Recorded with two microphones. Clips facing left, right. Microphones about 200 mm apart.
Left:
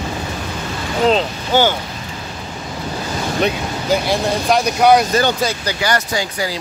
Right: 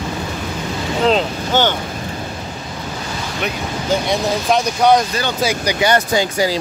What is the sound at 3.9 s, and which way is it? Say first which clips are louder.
Speech: left 1 dB; centre (ahead or behind).